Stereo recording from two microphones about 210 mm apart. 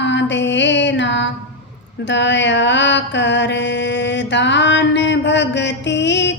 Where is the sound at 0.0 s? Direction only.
60° left (ahead or behind).